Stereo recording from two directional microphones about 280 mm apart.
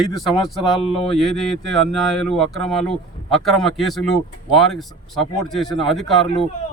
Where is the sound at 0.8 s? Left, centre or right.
Centre.